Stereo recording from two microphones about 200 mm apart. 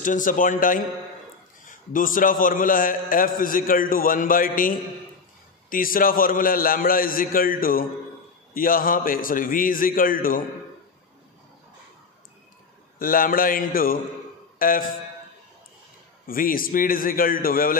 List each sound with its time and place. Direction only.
0.0 s a man's voice: 40° left (ahead or behind)
13.0 s a man's voice: 45° left (ahead or behind)
16.3 s a man's voice: 45° left (ahead or behind)